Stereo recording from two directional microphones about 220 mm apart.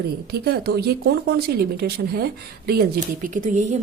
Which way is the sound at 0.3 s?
45° right (ahead or behind).